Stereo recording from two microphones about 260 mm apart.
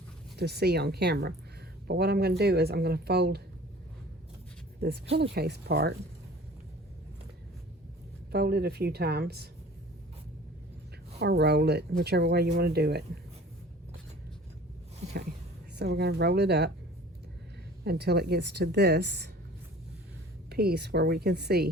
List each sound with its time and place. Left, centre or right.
0.3 s speech: right
4.8 s speech: right
8.3 s speech: right
11.2 s speech: right
15.0 s a sound: right
15.7 s speech: right
17.8 s speech: right
20.5 s speech: right